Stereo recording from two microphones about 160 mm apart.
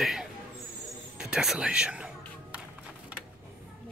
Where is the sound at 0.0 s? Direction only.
Centre (ahead or behind).